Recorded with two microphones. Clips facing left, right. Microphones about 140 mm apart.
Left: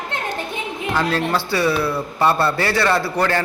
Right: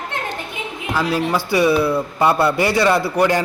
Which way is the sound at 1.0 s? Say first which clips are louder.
Right 2 dB; 10° right (ahead or behind).